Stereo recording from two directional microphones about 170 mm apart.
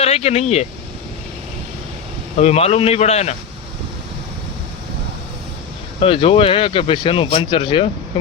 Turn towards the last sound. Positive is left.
turn(degrees=30)  # may be behind; listen again after turning